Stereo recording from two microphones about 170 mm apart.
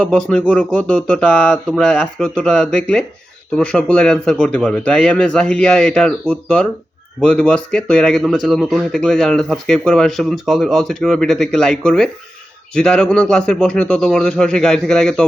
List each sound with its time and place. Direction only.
0.0 s speech: 5° left (ahead or behind)